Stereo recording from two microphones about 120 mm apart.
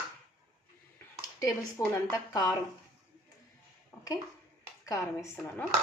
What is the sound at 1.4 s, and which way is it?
A woman's voice, 30° left (ahead or behind).